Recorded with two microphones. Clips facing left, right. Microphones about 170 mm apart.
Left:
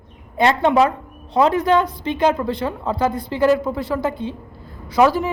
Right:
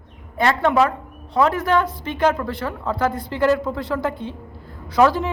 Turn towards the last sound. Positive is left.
turn(degrees=10)  # may be behind; listen again after turning